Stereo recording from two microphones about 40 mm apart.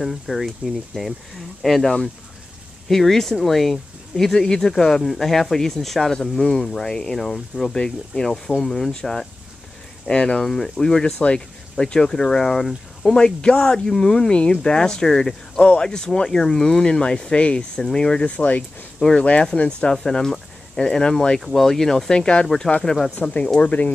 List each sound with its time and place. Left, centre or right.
0.0 s speech: centre
6.4 s speech: centre
10.0 s speech: left; by 13.1 s centre
13.1 s speech: left
18.2 s speech: left
19.1 s speech: left
20.0 s speech: centre
21.4 s speech: centre
22.1 s speech: left